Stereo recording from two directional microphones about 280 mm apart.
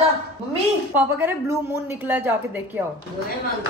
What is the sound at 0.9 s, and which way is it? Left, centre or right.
A woman's voice, centre.